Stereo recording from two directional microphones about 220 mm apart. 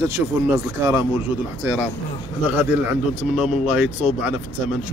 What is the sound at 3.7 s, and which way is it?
Speech, 5° right (ahead or behind).